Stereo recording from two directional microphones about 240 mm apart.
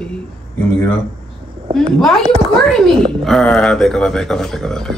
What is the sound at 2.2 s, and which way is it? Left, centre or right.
Speech, right.